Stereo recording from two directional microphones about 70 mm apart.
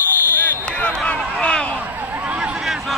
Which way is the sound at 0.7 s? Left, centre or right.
Centre.